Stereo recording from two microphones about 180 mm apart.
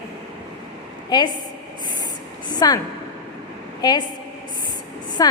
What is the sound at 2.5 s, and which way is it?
Speech, 20° left (ahead or behind).